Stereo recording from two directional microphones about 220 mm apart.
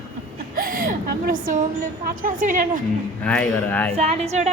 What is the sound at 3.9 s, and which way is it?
Speech, 25° right (ahead or behind).